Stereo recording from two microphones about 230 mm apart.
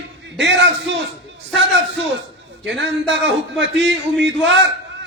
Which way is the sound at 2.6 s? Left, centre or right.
Right.